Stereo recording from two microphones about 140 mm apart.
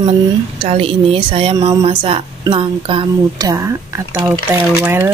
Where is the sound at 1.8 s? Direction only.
40° right (ahead or behind).